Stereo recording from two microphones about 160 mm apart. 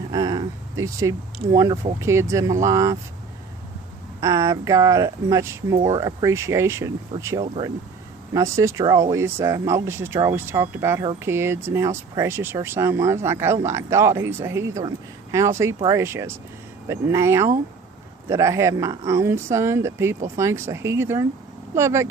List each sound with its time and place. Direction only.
0.1 s a sound: 25° right (ahead or behind)
1.5 s speech: 20° right (ahead or behind)
4.2 s speech: 20° right (ahead or behind)